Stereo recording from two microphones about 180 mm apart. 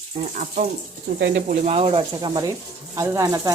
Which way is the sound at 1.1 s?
65° right (ahead or behind).